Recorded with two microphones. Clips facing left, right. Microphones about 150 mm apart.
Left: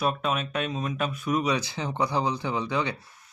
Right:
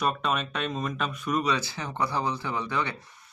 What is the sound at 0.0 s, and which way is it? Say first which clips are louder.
Speech: left 1 dB; 5° left (ahead or behind).